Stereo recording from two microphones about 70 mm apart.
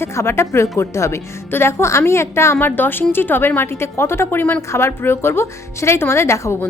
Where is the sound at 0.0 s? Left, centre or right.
Left.